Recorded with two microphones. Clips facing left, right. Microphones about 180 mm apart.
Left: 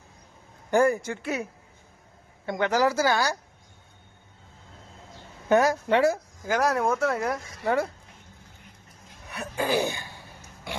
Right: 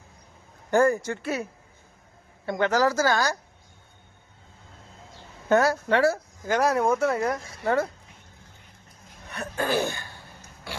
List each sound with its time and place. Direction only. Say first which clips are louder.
0.7 s speech: right 1 dB; 15° left (ahead or behind)
2.5 s speech: right 1 dB; 15° left (ahead or behind)
5.5 s speech: even; 15° left (ahead or behind)
6.5 s speech: right 2 dB; centre (ahead or behind)
9.3 s throat clearing: even; 10° left (ahead or behind)